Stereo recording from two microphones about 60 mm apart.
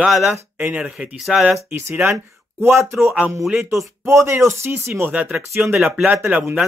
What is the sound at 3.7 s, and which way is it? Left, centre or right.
Speech, right.